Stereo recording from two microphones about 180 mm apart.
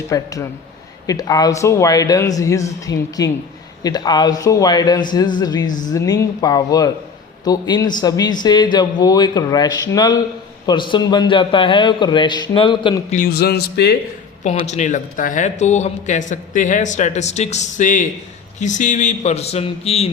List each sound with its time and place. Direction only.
0.1 s speech: 20° left (ahead or behind)
13.1 s speech: 50° left (ahead or behind)
14.4 s speech: 40° left (ahead or behind)